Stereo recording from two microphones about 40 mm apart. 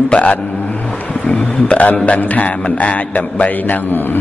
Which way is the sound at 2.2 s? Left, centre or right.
Left.